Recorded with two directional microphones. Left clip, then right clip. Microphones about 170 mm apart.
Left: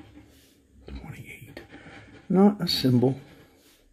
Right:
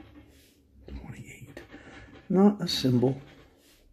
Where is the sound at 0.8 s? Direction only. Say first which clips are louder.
Left 3 dB; 35° left (ahead or behind).